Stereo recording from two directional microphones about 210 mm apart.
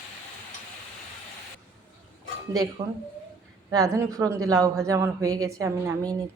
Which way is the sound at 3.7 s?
15° right (ahead or behind).